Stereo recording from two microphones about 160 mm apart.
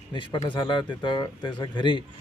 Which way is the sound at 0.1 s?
30° left (ahead or behind).